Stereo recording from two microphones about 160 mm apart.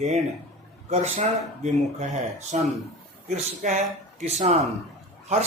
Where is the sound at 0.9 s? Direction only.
45° right (ahead or behind).